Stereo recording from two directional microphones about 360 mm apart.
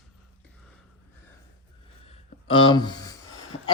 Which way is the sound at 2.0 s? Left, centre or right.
Centre.